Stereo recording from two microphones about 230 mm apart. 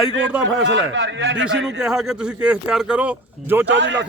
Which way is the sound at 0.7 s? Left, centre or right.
Right.